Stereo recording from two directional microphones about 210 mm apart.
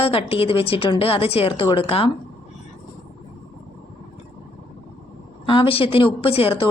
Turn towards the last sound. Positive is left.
turn(degrees=25)  # may be behind; listen again after turning